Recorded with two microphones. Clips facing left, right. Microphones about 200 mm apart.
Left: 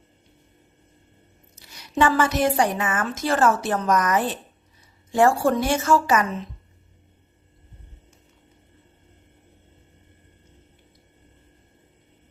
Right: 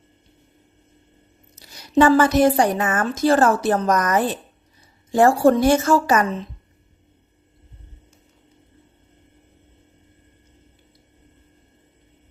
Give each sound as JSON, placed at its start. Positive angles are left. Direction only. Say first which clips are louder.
{"t": 1.5, "sound": "a woman's voice", "louder": "right 6 dB", "side_deg": -40}